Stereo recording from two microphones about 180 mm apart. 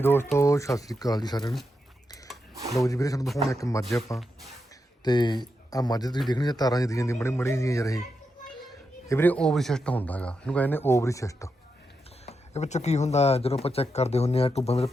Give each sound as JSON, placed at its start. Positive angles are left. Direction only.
{"t": 0.0, "sound": "speech", "side_deg": 10}
{"t": 2.8, "sound": "speech", "side_deg": 20}
{"t": 5.0, "sound": "speech", "side_deg": 25}
{"t": 9.0, "sound": "speech", "side_deg": 10}
{"t": 12.2, "sound": "speech", "side_deg": 35}